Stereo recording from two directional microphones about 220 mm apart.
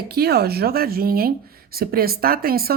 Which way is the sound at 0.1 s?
45° right (ahead or behind).